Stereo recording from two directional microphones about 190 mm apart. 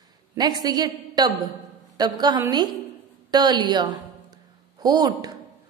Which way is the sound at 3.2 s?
20° right (ahead or behind).